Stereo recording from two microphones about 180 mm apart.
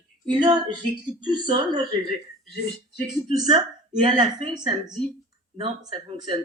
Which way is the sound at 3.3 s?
25° right (ahead or behind).